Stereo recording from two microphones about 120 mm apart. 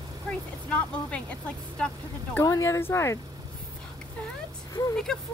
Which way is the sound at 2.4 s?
25° left (ahead or behind).